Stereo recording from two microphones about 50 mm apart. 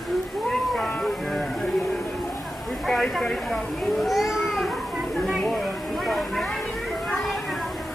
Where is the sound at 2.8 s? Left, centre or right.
Centre.